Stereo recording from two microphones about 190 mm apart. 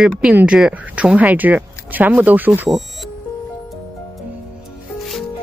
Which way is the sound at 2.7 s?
Centre (ahead or behind).